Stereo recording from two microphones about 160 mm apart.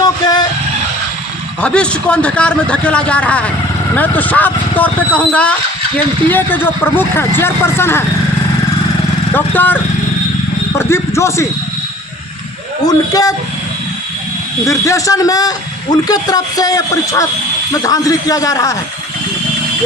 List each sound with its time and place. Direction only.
0.0 s vehicle: 25° left (ahead or behind)
1.6 s a man's voice: 5° left (ahead or behind)
9.3 s a man's voice: 10° left (ahead or behind)
10.8 s speech: 15° left (ahead or behind)
12.8 s a man's voice: 25° left (ahead or behind)
14.7 s a man's voice: 20° left (ahead or behind)